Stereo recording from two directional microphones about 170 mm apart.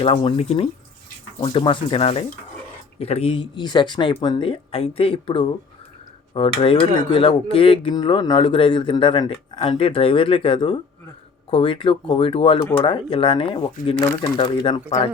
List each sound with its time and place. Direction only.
0.0 s speech: 35° left (ahead or behind)